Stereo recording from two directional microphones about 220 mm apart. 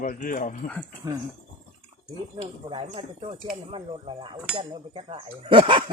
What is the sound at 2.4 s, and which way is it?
Speech, 25° right (ahead or behind).